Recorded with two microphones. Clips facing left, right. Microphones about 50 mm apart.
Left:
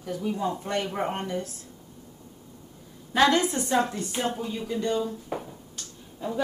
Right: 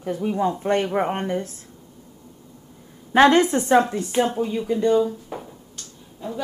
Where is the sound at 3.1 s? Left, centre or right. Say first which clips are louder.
Right 7 dB; right.